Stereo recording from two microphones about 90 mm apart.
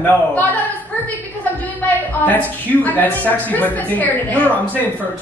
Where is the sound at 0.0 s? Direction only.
20° left (ahead or behind).